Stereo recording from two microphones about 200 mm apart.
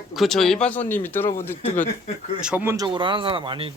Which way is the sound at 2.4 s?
5° right (ahead or behind).